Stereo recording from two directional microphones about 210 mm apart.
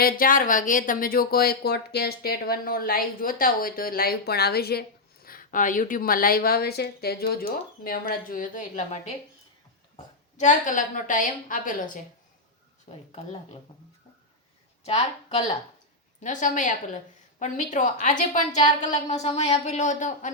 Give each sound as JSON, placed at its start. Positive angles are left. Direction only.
{"t": 0.0, "sound": "speech", "side_deg": 40}
{"t": 10.3, "sound": "a woman's voice", "side_deg": 35}
{"t": 13.1, "sound": "speech", "side_deg": 30}
{"t": 14.8, "sound": "a woman's voice", "side_deg": 30}